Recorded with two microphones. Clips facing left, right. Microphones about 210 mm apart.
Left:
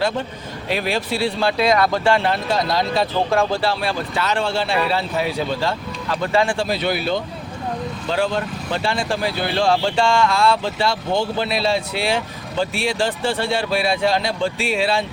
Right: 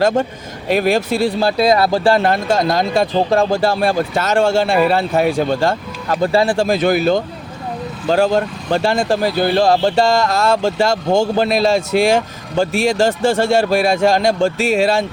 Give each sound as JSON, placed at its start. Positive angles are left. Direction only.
{"t": 0.0, "sound": "speech", "side_deg": -45}
{"t": 6.3, "sound": "speech", "side_deg": -35}